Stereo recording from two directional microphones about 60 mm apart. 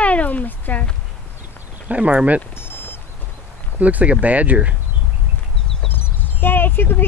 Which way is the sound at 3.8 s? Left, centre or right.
Right.